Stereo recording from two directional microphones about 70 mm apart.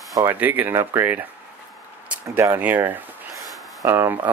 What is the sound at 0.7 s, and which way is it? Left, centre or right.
Speech, right.